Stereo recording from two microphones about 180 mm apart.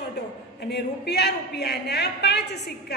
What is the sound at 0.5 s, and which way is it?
Speech, 65° left (ahead or behind).